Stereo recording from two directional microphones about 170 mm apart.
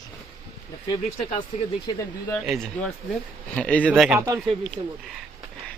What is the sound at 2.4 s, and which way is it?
Speech, centre (ahead or behind).